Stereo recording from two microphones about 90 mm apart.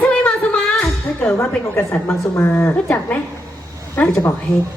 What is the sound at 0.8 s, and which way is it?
A woman's voice, 15° left (ahead or behind).